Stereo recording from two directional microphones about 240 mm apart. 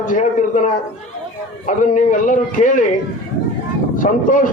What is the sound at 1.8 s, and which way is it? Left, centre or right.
A man's voice, left.